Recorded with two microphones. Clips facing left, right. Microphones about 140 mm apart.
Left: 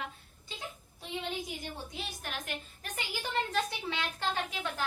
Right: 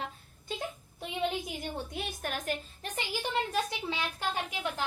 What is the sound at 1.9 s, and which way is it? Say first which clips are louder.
Speech: right 4 dB; 45° right (ahead or behind).